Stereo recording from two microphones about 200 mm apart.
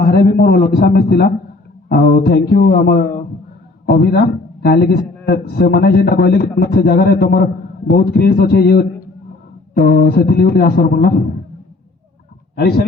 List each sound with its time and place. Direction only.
0.0 s a man's voice: 50° left (ahead or behind)
12.5 s speech: 55° left (ahead or behind)